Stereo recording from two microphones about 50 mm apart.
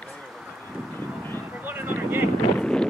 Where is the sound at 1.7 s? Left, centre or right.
Right.